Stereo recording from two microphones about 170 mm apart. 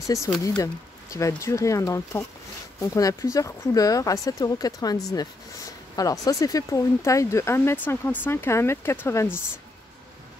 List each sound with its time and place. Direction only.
0.0 s speech: 20° left (ahead or behind)